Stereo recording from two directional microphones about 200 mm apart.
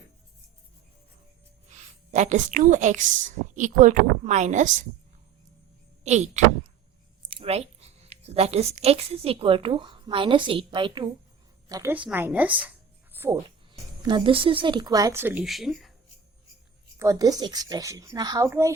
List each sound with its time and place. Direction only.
2.0 s a woman's voice: 35° right (ahead or behind)
6.1 s a woman's voice: 35° right (ahead or behind)
11.7 s a woman's voice: 15° right (ahead or behind)
17.0 s a woman's voice: 15° right (ahead or behind)